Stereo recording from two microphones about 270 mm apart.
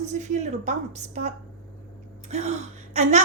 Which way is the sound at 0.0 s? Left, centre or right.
Right.